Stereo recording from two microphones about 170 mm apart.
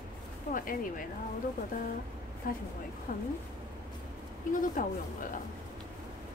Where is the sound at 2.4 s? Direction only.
55° left (ahead or behind).